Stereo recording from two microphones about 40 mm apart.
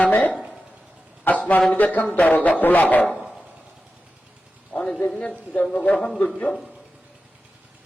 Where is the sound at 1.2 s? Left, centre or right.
Left.